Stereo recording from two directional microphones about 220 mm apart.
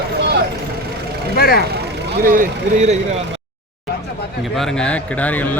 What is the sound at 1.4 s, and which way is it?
Speech, 45° left (ahead or behind).